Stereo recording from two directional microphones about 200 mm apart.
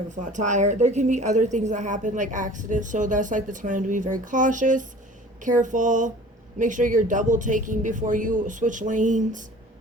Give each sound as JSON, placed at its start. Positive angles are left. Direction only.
{"t": 0.2, "sound": "a woman's voice", "side_deg": -35}